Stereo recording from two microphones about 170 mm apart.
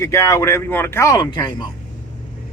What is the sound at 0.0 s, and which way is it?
Speech, 15° left (ahead or behind).